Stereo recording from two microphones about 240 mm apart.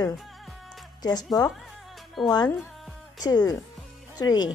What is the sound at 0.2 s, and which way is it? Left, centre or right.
Music, centre.